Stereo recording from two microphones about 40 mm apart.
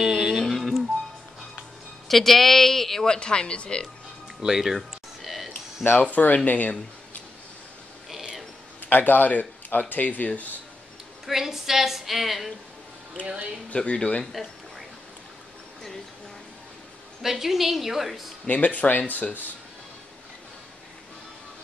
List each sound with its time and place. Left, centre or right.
0.4 s a sound: centre
2.0 s speech: centre
3.1 s speech: left
4.4 s a woman's voice: centre
4.7 s a sound: centre
5.9 s speech: left
8.8 s speech: left
11.2 s a woman's voice: centre
13.2 s speech: right
13.7 s speech: left
17.2 s a woman's voice: centre
18.5 s speech: left